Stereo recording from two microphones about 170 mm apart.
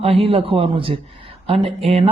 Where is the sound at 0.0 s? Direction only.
35° right (ahead or behind).